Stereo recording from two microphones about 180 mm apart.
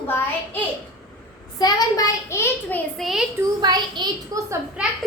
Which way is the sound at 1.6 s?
20° left (ahead or behind).